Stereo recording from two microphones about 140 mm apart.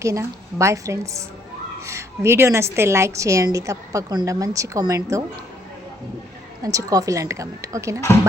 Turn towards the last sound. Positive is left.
turn(degrees=-20)  # may be behind; listen again after turning